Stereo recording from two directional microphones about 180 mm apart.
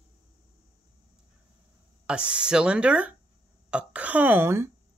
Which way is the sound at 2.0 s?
5° right (ahead or behind).